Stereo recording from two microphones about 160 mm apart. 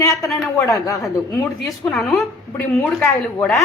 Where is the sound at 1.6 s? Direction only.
Centre (ahead or behind).